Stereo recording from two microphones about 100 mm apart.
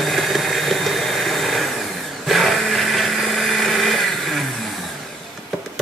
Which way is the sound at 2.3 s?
Centre (ahead or behind).